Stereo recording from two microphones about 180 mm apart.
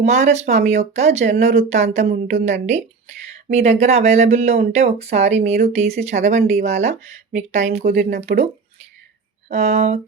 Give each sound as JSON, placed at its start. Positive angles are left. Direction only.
{"t": 0.0, "sound": "speech", "side_deg": -40}
{"t": 9.5, "sound": "speech", "side_deg": -35}